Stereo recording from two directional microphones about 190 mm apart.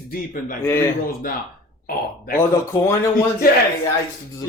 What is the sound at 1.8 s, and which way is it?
Speech, 50° left (ahead or behind).